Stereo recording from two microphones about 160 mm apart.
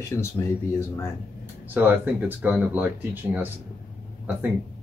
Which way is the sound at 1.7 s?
10° right (ahead or behind).